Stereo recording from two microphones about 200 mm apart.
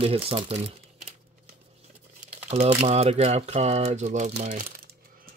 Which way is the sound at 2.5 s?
35° right (ahead or behind).